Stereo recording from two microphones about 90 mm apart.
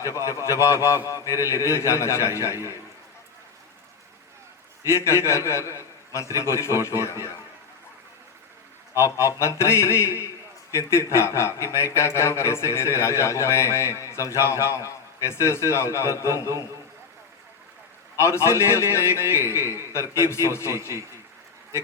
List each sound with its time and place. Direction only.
0.1 s a man's voice: 35° left (ahead or behind)
4.9 s a man's voice: 30° left (ahead or behind)
9.0 s a man's voice: 35° left (ahead or behind)
18.2 s a man's voice: 30° left (ahead or behind)
20.7 s a man's voice: 30° right (ahead or behind)